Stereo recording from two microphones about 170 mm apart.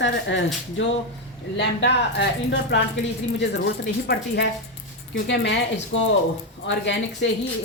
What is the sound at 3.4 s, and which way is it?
A woman's voice, 75° left (ahead or behind).